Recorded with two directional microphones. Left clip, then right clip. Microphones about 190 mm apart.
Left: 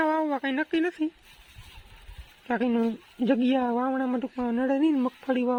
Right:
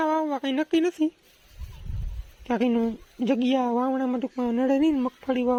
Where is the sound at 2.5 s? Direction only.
10° right (ahead or behind).